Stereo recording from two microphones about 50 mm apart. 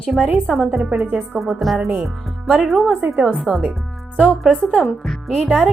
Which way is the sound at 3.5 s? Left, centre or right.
Centre.